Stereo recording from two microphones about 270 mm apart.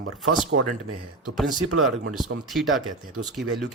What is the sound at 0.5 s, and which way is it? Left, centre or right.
Speech, right.